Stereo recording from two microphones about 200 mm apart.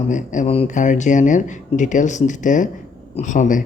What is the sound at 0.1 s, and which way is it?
Speech, 35° left (ahead or behind).